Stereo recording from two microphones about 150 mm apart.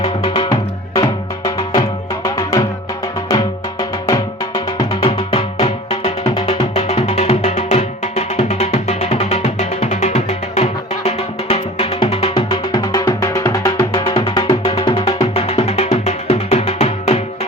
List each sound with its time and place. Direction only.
0.2 s music: 25° left (ahead or behind)
5.0 s music: 40° left (ahead or behind)
12.3 s music: 25° left (ahead or behind); by 17.2 s 40° left (ahead or behind)